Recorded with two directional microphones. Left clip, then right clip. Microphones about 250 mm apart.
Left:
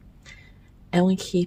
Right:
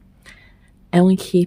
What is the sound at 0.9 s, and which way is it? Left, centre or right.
Speech, right.